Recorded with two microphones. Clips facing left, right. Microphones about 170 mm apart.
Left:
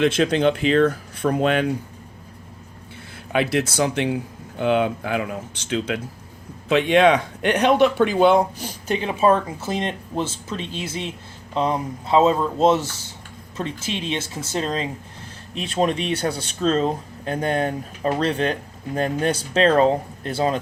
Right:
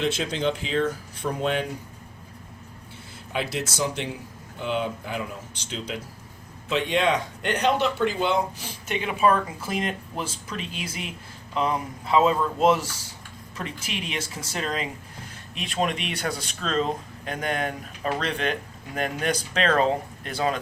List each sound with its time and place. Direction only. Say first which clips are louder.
0.0 s speech: left 7 dB; 65° left (ahead or behind)
3.3 s speech: left 8 dB; 65° left (ahead or behind)
8.6 s speech: left 5 dB; 35° left (ahead or behind)